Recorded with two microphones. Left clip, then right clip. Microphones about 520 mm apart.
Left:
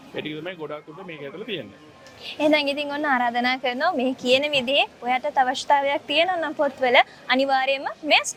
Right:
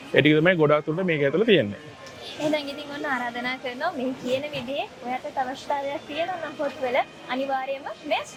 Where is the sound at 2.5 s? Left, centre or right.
Left.